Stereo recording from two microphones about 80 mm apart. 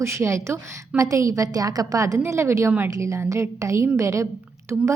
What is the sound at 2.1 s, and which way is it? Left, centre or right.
A woman's voice, right.